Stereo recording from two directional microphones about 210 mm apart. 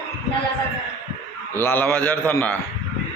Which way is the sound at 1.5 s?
10° left (ahead or behind).